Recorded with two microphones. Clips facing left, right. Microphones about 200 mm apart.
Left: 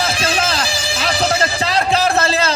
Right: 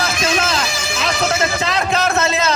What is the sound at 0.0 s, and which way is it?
A man's voice, 30° left (ahead or behind).